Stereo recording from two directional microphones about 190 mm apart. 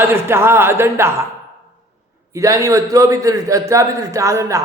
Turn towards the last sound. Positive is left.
turn(degrees=-15)  # may be behind; listen again after turning